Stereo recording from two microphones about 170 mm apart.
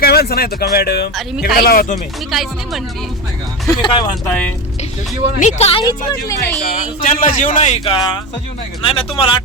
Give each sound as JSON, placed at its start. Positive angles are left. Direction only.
{"t": 0.0, "sound": "speech", "side_deg": 65}
{"t": 2.3, "sound": "speech", "side_deg": 0}
{"t": 3.8, "sound": "speech", "side_deg": 30}
{"t": 4.3, "sound": "speech", "side_deg": 10}
{"t": 5.4, "sound": "speech", "side_deg": 40}
{"t": 5.8, "sound": "speech", "side_deg": 20}
{"t": 7.0, "sound": "a man's voice", "side_deg": 50}
{"t": 7.9, "sound": "speech", "side_deg": 30}